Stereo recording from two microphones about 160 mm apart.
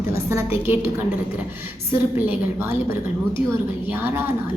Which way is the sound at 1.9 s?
15° right (ahead or behind).